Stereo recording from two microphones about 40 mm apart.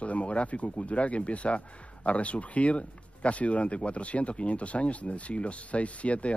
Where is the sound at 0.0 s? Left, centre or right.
Left.